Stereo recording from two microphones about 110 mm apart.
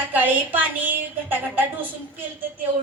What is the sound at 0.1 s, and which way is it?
A woman's voice, 15° right (ahead or behind).